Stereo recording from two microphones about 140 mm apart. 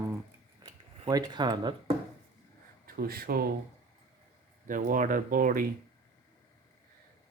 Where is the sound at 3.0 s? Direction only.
90° right.